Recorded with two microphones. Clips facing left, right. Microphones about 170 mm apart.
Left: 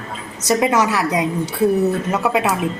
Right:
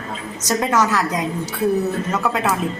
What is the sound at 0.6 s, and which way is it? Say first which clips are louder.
A woman's voice: left 1 dB; 15° left (ahead or behind).